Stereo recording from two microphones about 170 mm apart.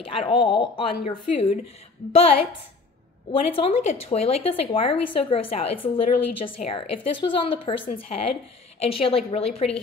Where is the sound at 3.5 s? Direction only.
35° left (ahead or behind).